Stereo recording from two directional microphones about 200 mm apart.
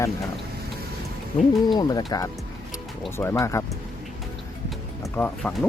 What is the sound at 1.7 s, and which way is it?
Speech, 20° left (ahead or behind).